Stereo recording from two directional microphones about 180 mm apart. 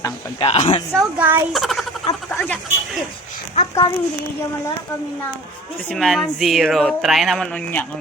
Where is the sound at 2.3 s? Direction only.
10° left (ahead or behind).